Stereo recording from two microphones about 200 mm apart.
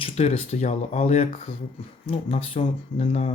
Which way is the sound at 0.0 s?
30° left (ahead or behind).